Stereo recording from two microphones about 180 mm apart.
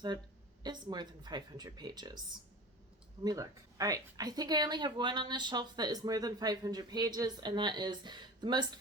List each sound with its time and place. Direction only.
0.6 s speech: 25° right (ahead or behind)
3.2 s speech: 20° right (ahead or behind)